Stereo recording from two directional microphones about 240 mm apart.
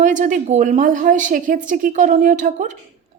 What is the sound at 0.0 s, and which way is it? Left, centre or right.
A woman's voice, right.